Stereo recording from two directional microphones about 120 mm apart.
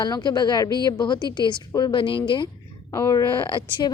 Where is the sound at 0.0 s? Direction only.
40° left (ahead or behind).